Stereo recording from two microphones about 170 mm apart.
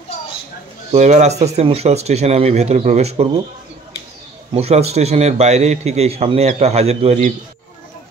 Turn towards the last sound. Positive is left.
turn(degrees=-40)  # may be behind; listen again after turning